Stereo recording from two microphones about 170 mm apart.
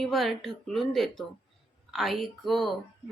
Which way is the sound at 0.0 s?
Centre (ahead or behind).